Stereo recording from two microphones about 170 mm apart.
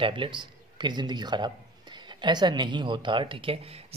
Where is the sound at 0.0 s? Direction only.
30° right (ahead or behind).